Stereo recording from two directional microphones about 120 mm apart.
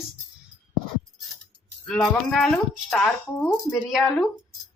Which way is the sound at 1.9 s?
5° left (ahead or behind).